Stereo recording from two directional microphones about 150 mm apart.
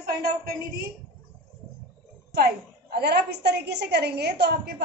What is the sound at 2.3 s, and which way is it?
A woman's voice, 90° right.